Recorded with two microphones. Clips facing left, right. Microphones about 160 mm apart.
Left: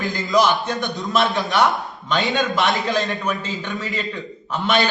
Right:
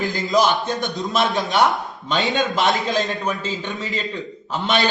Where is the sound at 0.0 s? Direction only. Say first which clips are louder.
Even; 20° right (ahead or behind).